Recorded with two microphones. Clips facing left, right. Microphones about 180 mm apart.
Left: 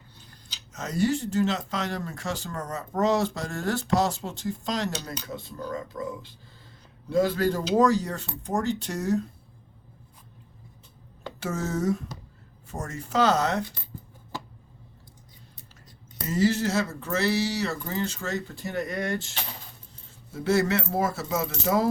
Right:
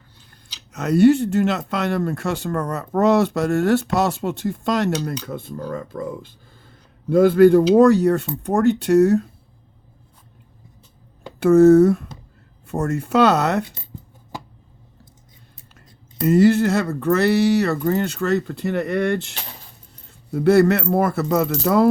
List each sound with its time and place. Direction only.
0.3 s speech: 65° right (ahead or behind)
11.3 s speech: 60° right (ahead or behind)
16.2 s speech: 60° right (ahead or behind)
20.3 s speech: 60° right (ahead or behind)